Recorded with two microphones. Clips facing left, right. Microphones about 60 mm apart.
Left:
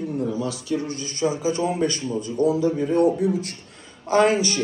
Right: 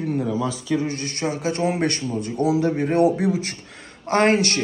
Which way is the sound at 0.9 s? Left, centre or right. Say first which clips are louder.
Left 1 dB; right.